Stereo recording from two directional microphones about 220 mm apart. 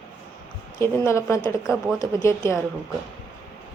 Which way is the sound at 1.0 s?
10° left (ahead or behind).